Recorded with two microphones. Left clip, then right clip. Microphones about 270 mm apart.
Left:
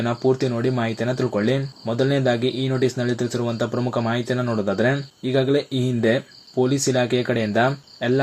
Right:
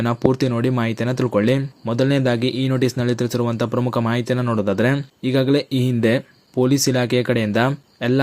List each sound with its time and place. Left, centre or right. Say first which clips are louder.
0.0 s speech: right 1 dB; right